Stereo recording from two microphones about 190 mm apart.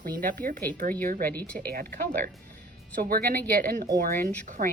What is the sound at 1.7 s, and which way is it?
Speech, 50° right (ahead or behind).